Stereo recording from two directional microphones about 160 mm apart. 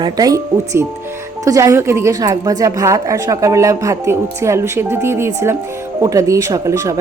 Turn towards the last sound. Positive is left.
turn(degrees=-20)  # may be behind; listen again after turning